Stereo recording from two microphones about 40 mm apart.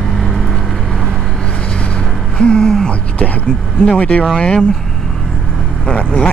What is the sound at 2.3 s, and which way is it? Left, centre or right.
Speech, left.